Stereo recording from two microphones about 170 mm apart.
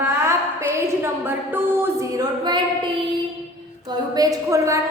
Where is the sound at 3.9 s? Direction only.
20° right (ahead or behind).